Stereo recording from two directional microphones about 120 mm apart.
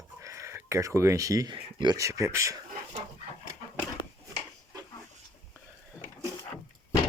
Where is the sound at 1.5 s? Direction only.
40° right (ahead or behind).